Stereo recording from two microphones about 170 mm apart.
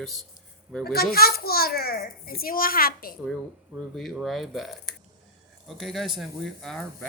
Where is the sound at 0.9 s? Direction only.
65° left (ahead or behind).